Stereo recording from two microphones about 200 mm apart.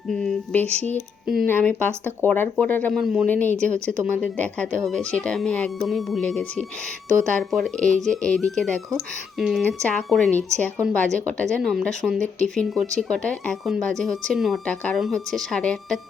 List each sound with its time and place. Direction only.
0.1 s speech: centre (ahead or behind)